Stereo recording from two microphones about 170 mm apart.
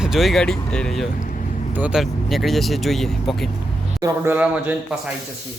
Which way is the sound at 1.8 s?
5° right (ahead or behind).